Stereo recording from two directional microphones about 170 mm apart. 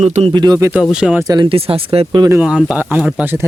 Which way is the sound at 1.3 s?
30° right (ahead or behind).